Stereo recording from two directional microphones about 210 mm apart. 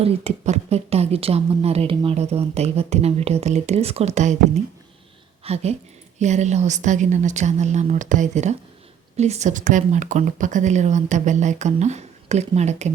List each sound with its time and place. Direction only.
0.0 s speech: 30° right (ahead or behind)
5.4 s a woman's voice: 30° right (ahead or behind)